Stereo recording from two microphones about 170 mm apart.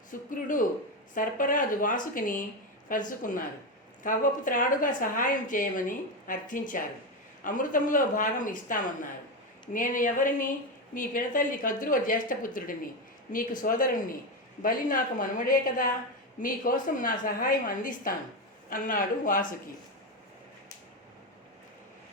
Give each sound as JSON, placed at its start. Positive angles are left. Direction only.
{"t": 0.1, "sound": "a woman's voice", "side_deg": 50}